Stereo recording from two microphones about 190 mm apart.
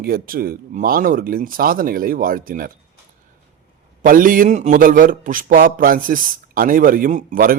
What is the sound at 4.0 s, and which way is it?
Speech, 45° right (ahead or behind).